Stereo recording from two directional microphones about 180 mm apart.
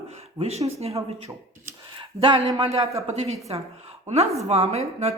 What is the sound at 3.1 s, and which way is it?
Speech, 40° right (ahead or behind).